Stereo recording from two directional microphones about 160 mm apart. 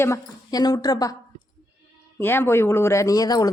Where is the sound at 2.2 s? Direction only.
15° left (ahead or behind).